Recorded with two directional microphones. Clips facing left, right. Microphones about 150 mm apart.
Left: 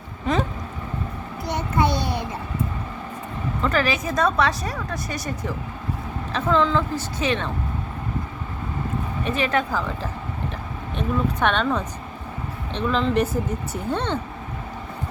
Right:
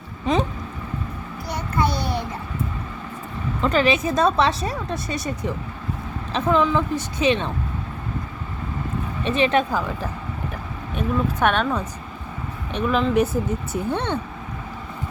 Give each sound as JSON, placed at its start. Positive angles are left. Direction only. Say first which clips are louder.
{"t": 0.3, "sound": "a woman's voice", "louder": "right 2 dB", "side_deg": -20}
{"t": 1.5, "sound": "a sound", "louder": "left 1 dB", "side_deg": 20}
{"t": 3.6, "sound": "a woman's voice", "louder": "right 4 dB", "side_deg": -20}
{"t": 9.2, "sound": "a woman's voice", "louder": "right 4 dB", "side_deg": -25}